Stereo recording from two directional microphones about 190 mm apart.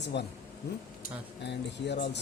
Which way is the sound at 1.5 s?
65° left (ahead or behind).